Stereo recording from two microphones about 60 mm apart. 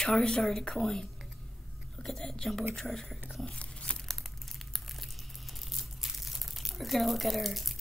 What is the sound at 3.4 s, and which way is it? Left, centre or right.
Tearing, centre.